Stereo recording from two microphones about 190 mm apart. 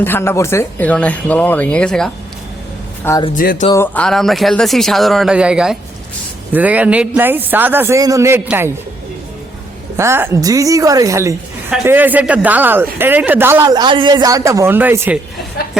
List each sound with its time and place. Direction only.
0.0 s speech: 10° left (ahead or behind)
3.0 s a man's voice: 15° left (ahead or behind)
3.3 s speech: 45° left (ahead or behind)
3.7 s speech: 10° left (ahead or behind); by 8.7 s 10° right (ahead or behind)
10.0 s speech: 15° right (ahead or behind)